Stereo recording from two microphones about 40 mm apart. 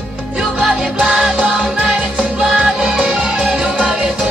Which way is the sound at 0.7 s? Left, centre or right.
Right.